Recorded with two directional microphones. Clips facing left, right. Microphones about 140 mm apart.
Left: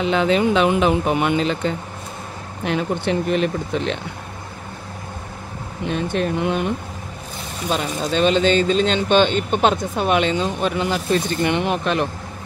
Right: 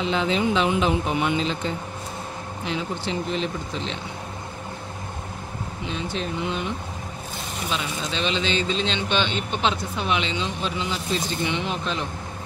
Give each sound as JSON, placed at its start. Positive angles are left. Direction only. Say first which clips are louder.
{"t": 0.0, "sound": "speech", "louder": "left 5 dB", "side_deg": 60}
{"t": 5.9, "sound": "speech", "louder": "left 8 dB", "side_deg": 55}
{"t": 7.7, "sound": "speech", "louder": "left 8 dB", "side_deg": 50}